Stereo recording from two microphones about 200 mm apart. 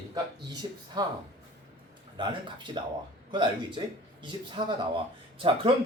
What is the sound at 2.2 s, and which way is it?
Speech, 25° right (ahead or behind).